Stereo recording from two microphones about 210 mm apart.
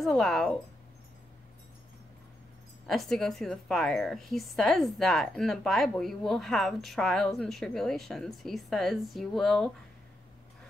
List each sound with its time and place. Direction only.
0.0 s a woman's voice: centre (ahead or behind)
2.9 s a woman's voice: centre (ahead or behind)